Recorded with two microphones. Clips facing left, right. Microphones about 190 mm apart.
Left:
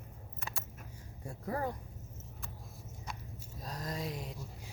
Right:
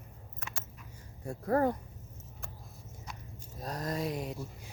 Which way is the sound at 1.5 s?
60° right (ahead or behind).